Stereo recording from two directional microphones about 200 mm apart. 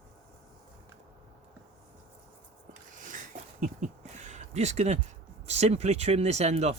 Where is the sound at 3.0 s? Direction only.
40° right (ahead or behind).